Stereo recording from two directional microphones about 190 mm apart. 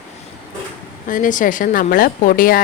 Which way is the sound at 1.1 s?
45° left (ahead or behind).